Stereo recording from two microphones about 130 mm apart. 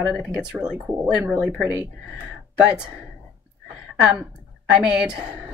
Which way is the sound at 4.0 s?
5° right (ahead or behind).